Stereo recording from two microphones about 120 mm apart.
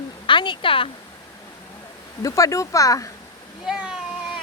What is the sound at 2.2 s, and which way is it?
Speech, 25° left (ahead or behind).